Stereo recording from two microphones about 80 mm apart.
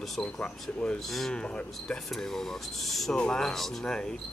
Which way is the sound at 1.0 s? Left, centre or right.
Centre.